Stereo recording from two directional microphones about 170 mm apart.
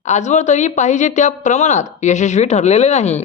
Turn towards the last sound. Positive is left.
turn(degrees=40)  # may be behind; listen again after turning